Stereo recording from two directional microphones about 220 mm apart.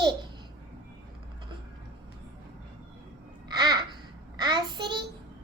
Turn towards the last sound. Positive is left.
turn(degrees=-20)  # may be behind; listen again after turning